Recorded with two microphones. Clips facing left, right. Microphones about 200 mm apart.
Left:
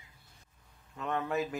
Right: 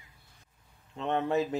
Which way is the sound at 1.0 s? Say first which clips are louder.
Right 4 dB; 25° right (ahead or behind).